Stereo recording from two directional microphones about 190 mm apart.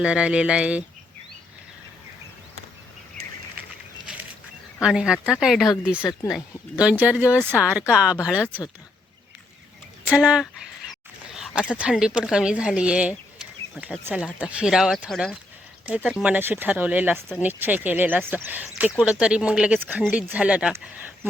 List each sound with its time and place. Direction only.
0.0 s speech: 5° right (ahead or behind)
4.0 s a sound: 5° right (ahead or behind)
4.8 s speech: 5° right (ahead or behind)
6.0 s speech: 15° left (ahead or behind)
6.3 s speech: 5° right (ahead or behind)
10.1 s speech: 5° right (ahead or behind)